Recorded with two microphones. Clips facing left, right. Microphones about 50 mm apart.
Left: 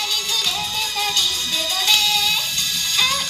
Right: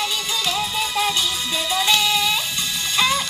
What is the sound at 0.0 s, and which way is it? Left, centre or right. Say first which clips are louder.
Music: right 1 dB; centre.